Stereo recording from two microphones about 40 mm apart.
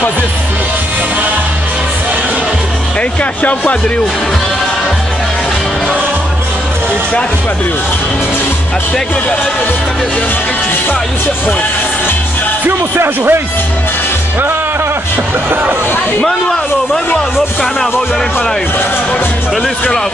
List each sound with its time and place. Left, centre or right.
3.0 s speech: left
12.9 s speech: right